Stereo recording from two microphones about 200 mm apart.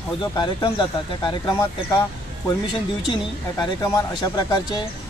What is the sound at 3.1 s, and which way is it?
Speech, 20° left (ahead or behind).